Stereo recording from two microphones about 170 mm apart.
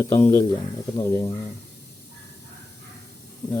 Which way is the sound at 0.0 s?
15° left (ahead or behind).